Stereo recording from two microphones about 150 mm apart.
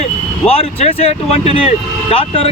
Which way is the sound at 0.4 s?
40° left (ahead or behind).